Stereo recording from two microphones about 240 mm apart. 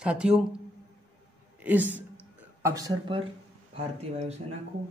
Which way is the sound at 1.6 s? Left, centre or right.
Centre.